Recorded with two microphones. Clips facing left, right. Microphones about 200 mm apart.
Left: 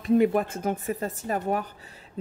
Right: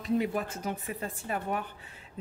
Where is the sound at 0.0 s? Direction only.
55° left (ahead or behind).